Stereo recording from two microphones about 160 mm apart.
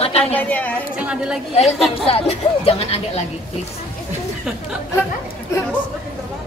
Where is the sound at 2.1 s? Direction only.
40° left (ahead or behind).